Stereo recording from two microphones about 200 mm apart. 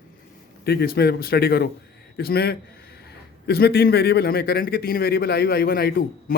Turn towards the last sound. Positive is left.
turn(degrees=50)  # may be behind; listen again after turning